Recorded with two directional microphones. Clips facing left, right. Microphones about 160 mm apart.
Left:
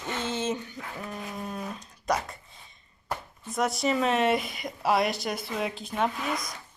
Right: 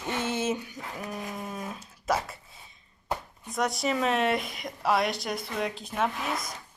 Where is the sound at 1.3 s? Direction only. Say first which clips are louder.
Left 1 dB; 5° right (ahead or behind).